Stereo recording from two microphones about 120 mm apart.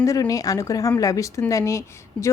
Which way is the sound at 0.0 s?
30° left (ahead or behind).